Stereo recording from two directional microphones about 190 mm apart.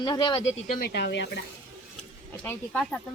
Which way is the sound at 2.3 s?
5° left (ahead or behind).